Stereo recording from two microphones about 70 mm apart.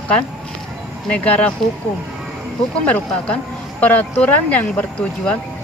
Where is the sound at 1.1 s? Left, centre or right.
Left.